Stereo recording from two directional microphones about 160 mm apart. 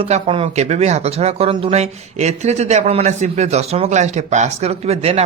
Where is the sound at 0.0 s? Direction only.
35° right (ahead or behind).